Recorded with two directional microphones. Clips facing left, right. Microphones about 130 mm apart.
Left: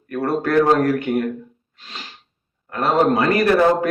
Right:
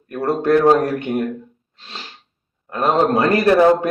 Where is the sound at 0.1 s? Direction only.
25° right (ahead or behind).